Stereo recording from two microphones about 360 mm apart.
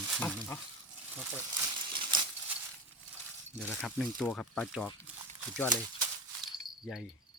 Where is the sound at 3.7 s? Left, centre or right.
Centre.